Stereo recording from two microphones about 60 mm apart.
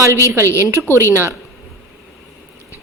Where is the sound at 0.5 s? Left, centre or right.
Right.